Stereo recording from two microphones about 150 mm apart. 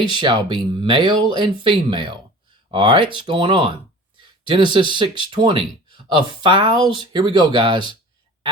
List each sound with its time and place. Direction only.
0.1 s speech: 30° right (ahead or behind)